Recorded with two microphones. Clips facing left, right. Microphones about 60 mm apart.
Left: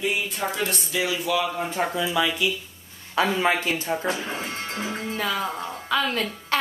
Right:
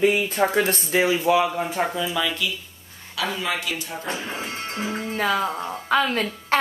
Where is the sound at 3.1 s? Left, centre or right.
Left.